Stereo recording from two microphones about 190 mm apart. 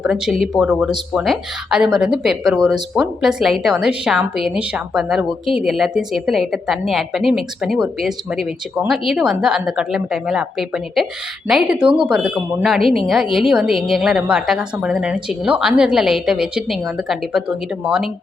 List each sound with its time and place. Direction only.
0.0 s speech: centre (ahead or behind)